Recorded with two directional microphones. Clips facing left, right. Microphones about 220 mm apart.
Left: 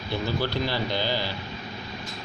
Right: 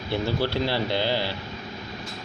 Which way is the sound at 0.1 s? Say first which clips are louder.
Right 2 dB; 30° right (ahead or behind).